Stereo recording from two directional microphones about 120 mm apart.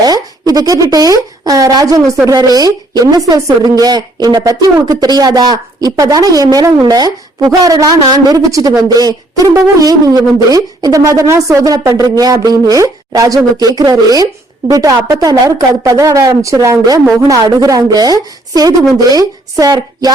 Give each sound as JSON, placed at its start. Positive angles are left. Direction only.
{"t": 0.0, "sound": "a woman's voice", "side_deg": -30}